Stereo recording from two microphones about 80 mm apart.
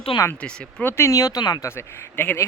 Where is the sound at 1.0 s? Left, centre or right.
Left.